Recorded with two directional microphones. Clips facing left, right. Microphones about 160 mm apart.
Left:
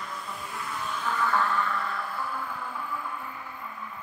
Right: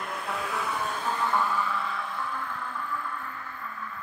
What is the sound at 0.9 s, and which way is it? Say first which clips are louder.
Music: right 1 dB; 40° right (ahead or behind).